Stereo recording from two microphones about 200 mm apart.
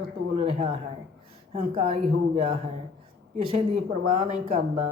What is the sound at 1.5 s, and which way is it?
Speech, 30° right (ahead or behind).